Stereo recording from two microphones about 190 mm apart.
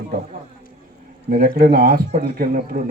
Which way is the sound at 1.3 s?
50° right (ahead or behind).